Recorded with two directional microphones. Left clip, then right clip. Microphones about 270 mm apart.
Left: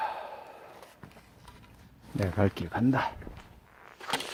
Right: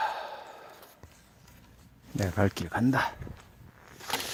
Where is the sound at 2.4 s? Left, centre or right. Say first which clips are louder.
Right 1 dB; centre.